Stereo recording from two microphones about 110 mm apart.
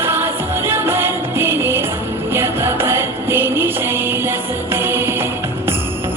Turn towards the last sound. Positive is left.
turn(degrees=-20)  # may be behind; listen again after turning